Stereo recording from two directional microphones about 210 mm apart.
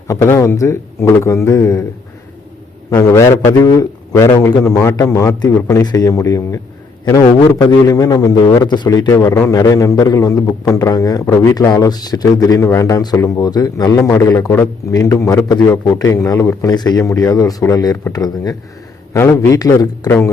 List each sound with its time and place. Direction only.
0.1 s a man's voice: 15° left (ahead or behind)
2.9 s a man's voice: 15° left (ahead or behind)